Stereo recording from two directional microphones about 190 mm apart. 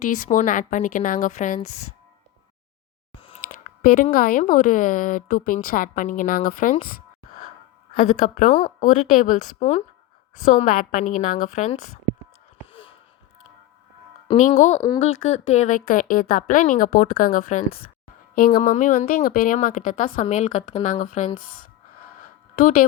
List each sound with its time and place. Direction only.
0.0 s a woman's voice: 45° left (ahead or behind)
3.8 s a woman's voice: 45° left (ahead or behind)
14.3 s a woman's voice: 40° left (ahead or behind)
18.6 s a woman's voice: 40° left (ahead or behind)